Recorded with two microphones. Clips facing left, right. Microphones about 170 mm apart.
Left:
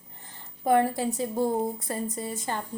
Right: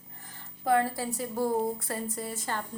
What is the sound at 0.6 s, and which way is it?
A woman's voice, 20° left (ahead or behind).